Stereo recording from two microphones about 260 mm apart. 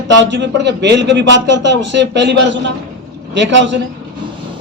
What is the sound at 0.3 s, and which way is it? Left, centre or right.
A man's voice, right.